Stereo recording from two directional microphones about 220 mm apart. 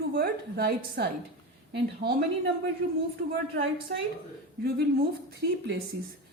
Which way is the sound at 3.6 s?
50° right (ahead or behind).